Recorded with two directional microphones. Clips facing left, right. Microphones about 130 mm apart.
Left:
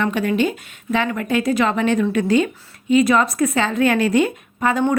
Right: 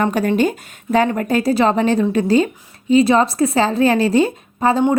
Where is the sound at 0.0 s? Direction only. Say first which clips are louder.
Right 3 dB; 40° right (ahead or behind).